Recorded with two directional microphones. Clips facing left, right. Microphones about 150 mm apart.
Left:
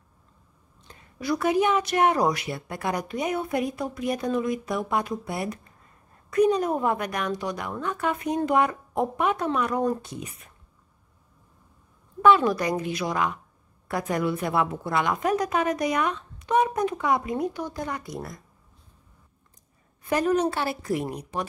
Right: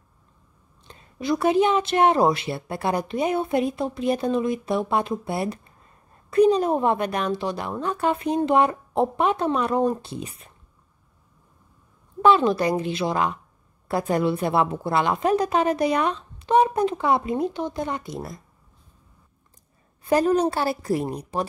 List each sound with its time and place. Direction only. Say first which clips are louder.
0.8 s a woman's voice: right 3 dB; 25° right (ahead or behind)
12.2 s a woman's voice: right 1 dB; 25° right (ahead or behind)
20.1 s speech: right 3 dB; 30° right (ahead or behind)